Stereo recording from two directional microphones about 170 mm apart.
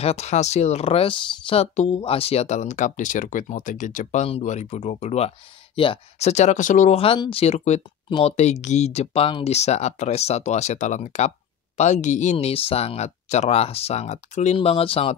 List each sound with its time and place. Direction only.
0.0 s speech: 40° left (ahead or behind)